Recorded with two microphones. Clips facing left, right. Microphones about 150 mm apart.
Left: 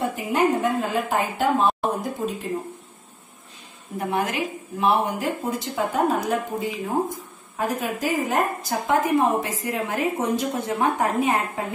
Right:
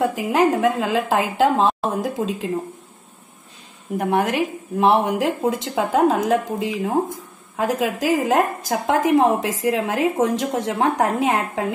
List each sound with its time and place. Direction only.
0.1 s a woman's voice: 90° right
4.0 s a woman's voice: 70° right (ahead or behind); by 11.6 s 90° right